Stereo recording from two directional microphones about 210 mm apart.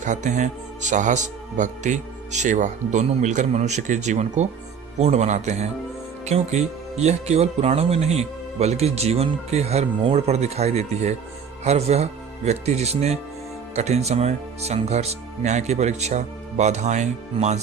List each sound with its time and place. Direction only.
0.0 s speech: 35° right (ahead or behind)